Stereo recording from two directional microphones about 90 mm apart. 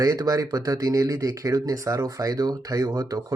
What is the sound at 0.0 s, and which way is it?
Speech, 40° right (ahead or behind).